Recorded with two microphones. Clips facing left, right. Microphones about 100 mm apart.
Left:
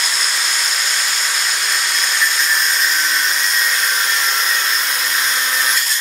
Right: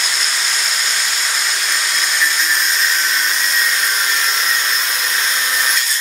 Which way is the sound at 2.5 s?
Centre (ahead or behind).